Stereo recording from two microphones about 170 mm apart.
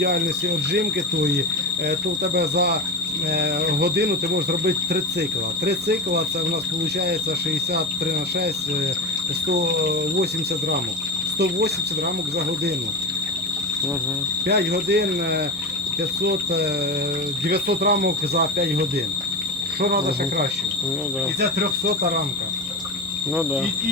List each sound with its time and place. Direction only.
0.0 s speech: 75° right (ahead or behind)
9.5 s speech: 75° right (ahead or behind)
14.4 s speech: 75° right (ahead or behind)
21.6 s speech: 60° right (ahead or behind)